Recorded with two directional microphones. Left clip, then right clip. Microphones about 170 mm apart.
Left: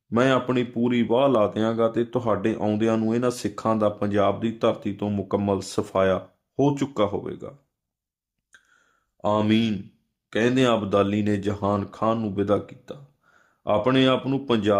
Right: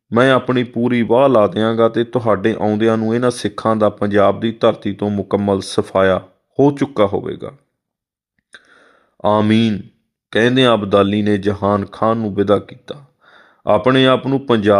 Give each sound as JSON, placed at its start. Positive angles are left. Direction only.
{"t": 0.1, "sound": "speech", "side_deg": -25}
{"t": 8.5, "sound": "a sound", "side_deg": -25}
{"t": 9.2, "sound": "speech", "side_deg": -25}